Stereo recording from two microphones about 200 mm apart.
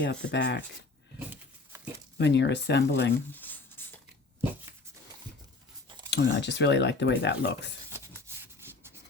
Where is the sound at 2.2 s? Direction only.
60° left (ahead or behind).